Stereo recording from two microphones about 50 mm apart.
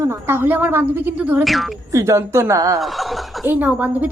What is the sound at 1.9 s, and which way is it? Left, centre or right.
Speech, right.